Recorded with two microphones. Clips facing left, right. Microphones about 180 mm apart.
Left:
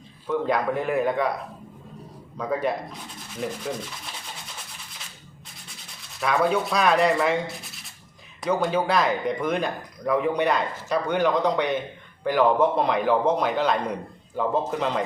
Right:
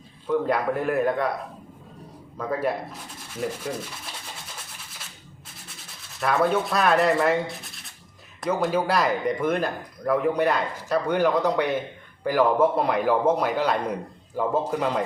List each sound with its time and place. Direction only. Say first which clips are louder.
0.3 s speech: right 1 dB; centre (ahead or behind)
2.4 s speech: even; 5° right (ahead or behind)
6.1 s a man's voice: even; centre (ahead or behind)